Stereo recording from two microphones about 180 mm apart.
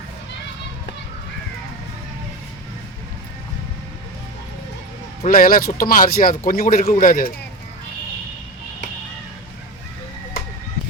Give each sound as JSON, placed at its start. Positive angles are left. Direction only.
{"t": 5.3, "sound": "speech", "side_deg": 50}